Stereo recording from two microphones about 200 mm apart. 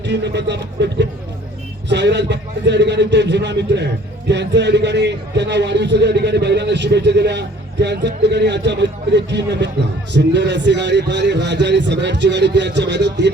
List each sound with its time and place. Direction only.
0.0 s a man's voice: 60° right (ahead or behind)